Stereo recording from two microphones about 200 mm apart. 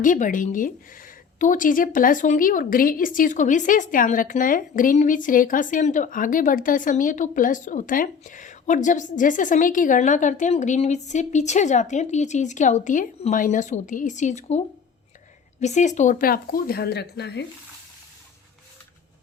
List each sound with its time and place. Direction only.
0.0 s a woman's voice: 40° left (ahead or behind)
15.6 s speech: 35° left (ahead or behind); by 17.4 s 55° left (ahead or behind)